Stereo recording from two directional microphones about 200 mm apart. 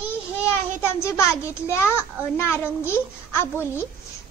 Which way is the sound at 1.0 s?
15° left (ahead or behind).